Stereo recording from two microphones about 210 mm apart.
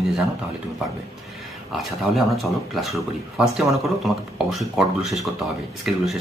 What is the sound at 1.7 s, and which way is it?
Speech, centre (ahead or behind).